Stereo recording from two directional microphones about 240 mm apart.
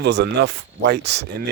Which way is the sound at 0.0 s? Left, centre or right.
Right.